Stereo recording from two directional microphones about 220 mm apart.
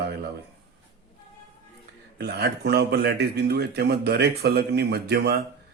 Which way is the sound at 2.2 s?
50° right (ahead or behind).